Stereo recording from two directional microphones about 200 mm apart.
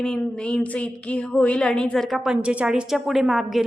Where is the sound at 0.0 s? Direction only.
5° left (ahead or behind).